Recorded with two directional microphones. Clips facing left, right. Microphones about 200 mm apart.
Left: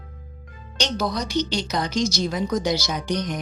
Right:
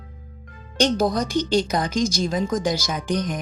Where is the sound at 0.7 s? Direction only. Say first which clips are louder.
Right 6 dB; 50° right (ahead or behind).